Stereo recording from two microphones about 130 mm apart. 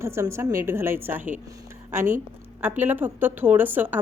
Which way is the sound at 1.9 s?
75° right (ahead or behind).